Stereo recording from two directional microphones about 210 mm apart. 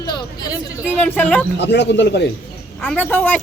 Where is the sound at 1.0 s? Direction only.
5° left (ahead or behind).